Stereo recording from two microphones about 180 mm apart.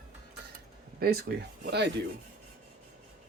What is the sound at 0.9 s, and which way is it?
Speech, 60° right (ahead or behind).